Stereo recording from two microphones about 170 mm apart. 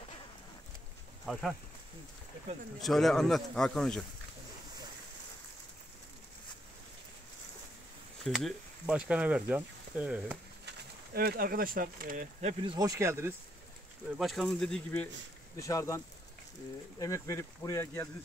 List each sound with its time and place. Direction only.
1.2 s speech: centre (ahead or behind)
2.8 s speech: centre (ahead or behind)
8.2 s speech: centre (ahead or behind)
11.1 s speech: 60° right (ahead or behind); by 12.7 s 40° right (ahead or behind)
12.7 s speech: 20° right (ahead or behind)
14.1 s speech: centre (ahead or behind)
15.5 s speech: 15° left (ahead or behind)
17.0 s speech: 20° left (ahead or behind)